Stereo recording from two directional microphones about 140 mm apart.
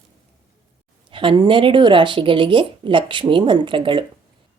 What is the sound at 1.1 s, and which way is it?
Speech, 35° right (ahead or behind).